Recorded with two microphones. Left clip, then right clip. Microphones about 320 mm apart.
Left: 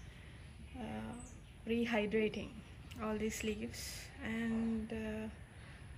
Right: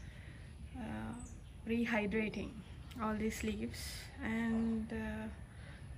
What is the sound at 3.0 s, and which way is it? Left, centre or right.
Speech, centre.